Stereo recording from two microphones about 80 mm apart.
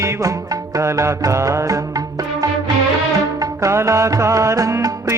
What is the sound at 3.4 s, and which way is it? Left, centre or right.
Music, right.